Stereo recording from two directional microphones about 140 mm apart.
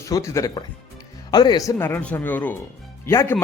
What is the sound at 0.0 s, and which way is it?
A man's voice, 20° left (ahead or behind).